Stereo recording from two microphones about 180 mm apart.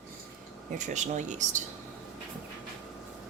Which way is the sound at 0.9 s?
40° right (ahead or behind).